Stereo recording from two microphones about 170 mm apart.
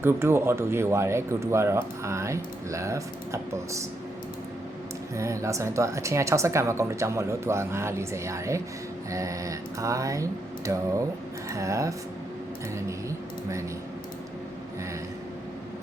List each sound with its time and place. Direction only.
0.0 s speech: 15° right (ahead or behind)
5.1 s speech: 15° right (ahead or behind)
9.0 s mantra: 20° right (ahead or behind)
11.4 s speech: 20° right (ahead or behind)